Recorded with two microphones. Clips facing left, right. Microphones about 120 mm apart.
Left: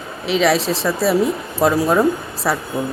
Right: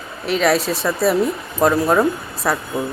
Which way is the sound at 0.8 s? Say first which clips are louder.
Left 1 dB; centre (ahead or behind).